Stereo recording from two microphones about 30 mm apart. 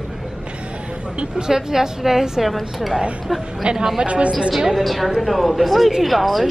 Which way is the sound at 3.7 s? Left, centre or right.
Centre.